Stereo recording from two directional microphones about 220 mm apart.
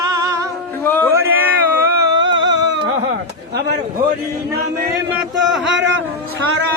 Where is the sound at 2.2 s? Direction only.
55° right (ahead or behind).